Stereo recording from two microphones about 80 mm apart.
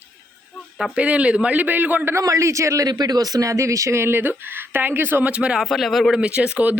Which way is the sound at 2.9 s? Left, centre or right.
Right.